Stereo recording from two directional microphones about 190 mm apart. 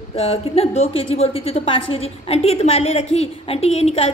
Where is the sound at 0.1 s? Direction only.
30° left (ahead or behind).